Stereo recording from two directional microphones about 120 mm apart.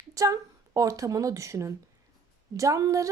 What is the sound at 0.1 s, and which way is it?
A woman's voice, 25° right (ahead or behind).